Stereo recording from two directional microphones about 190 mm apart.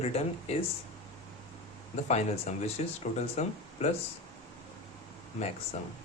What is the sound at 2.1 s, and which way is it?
Speech, 35° left (ahead or behind).